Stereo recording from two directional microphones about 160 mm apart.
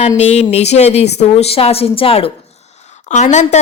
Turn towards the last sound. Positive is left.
turn(degrees=45)  # may be behind; listen again after turning